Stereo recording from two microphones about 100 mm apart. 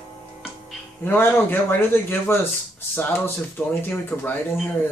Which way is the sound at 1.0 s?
20° left (ahead or behind).